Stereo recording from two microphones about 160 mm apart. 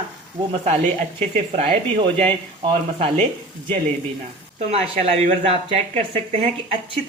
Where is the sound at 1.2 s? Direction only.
40° right (ahead or behind).